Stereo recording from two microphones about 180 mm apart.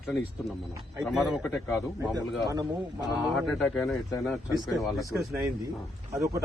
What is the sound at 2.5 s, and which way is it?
Speech, 20° right (ahead or behind).